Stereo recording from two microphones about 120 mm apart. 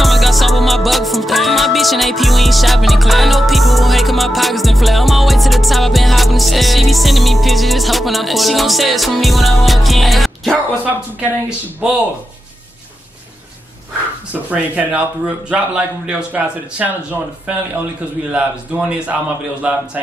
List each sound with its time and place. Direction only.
0.0 s music: centre (ahead or behind)
11.8 s a man's voice: 10° right (ahead or behind)
14.3 s a man's voice: 10° right (ahead or behind)
18.3 s a man's voice: 10° right (ahead or behind)